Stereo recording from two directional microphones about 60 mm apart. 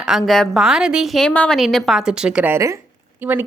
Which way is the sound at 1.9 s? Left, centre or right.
Centre.